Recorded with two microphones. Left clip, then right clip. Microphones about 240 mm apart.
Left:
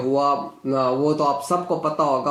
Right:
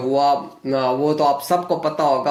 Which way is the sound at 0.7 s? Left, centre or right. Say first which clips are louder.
Right 2 dB; right.